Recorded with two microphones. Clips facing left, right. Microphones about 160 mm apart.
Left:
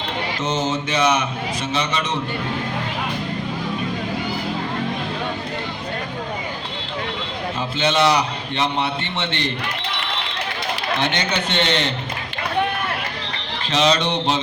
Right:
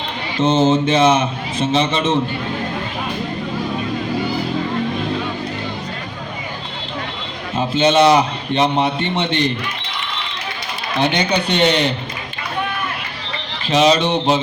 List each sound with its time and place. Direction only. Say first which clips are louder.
0.3 s a man's voice: right 10 dB; 25° right (ahead or behind)
7.5 s a man's voice: right 7 dB; 20° right (ahead or behind)
11.0 s speech: right 9 dB; 15° right (ahead or behind)
13.7 s speech: right 5 dB; 10° right (ahead or behind)